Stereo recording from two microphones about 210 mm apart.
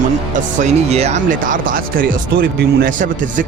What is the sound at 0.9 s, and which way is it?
Speech, 30° right (ahead or behind).